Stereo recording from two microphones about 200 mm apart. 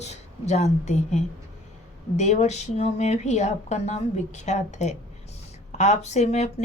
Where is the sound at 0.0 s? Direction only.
35° left (ahead or behind).